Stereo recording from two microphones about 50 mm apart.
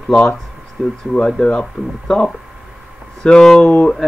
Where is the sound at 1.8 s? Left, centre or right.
Left.